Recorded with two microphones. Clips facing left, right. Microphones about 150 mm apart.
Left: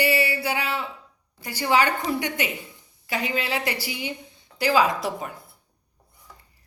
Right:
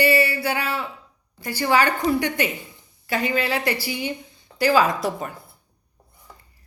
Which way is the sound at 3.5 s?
15° left (ahead or behind).